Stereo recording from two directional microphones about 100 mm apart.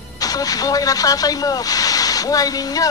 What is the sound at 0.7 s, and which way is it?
Speech, 35° left (ahead or behind).